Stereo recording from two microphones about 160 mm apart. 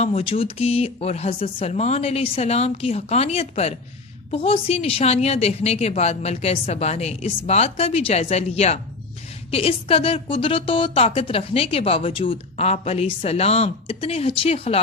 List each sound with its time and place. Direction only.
0.0 s a woman's voice: 40° left (ahead or behind)